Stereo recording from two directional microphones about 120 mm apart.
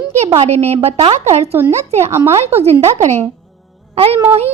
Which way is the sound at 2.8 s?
70° right (ahead or behind).